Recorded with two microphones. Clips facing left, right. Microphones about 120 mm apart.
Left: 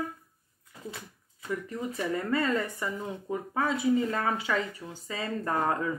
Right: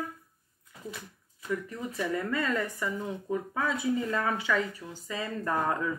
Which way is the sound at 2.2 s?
30° left (ahead or behind).